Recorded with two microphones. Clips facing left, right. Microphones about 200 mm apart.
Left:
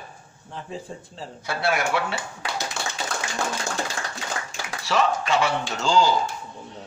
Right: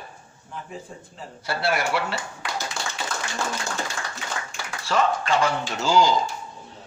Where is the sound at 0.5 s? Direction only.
30° left (ahead or behind).